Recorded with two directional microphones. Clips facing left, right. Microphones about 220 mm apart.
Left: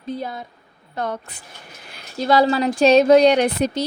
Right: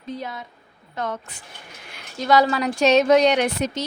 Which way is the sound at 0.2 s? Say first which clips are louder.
Left 3 dB; 35° left (ahead or behind).